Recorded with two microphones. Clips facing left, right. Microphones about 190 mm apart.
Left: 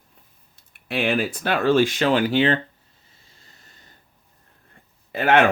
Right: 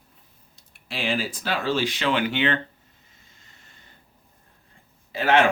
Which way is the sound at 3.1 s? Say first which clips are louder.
Left 5 dB; 35° left (ahead or behind).